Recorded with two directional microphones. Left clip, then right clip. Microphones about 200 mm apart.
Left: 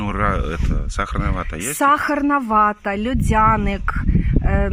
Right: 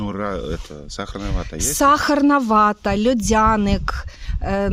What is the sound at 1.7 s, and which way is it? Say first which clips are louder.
Speech: right 1 dB; 60° right (ahead or behind).